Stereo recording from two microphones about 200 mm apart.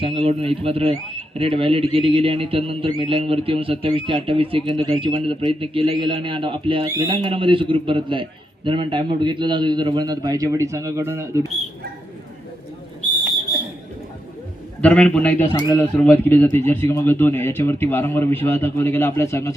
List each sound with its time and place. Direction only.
0.0 s speech: 30° right (ahead or behind)
14.8 s a man's voice: 5° left (ahead or behind)
15.5 s a man's voice: 20° left (ahead or behind)